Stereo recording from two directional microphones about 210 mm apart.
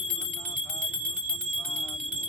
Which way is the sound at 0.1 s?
5° left (ahead or behind).